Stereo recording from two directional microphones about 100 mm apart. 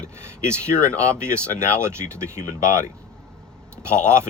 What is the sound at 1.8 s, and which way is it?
Speech, 25° right (ahead or behind).